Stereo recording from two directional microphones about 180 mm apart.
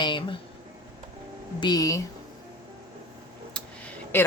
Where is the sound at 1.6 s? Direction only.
20° left (ahead or behind).